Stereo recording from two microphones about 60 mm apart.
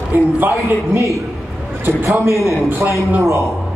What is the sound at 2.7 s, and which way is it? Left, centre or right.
Speech, right.